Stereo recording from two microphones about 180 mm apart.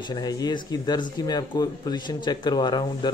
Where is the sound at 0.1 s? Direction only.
20° left (ahead or behind).